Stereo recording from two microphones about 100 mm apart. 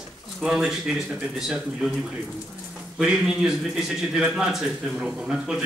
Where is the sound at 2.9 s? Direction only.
5° right (ahead or behind).